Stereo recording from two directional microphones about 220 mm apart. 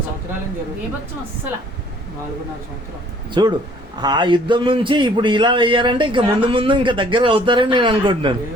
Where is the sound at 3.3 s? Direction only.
20° right (ahead or behind).